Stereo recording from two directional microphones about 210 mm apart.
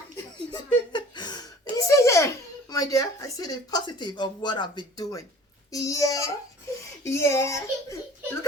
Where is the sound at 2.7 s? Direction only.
15° left (ahead or behind).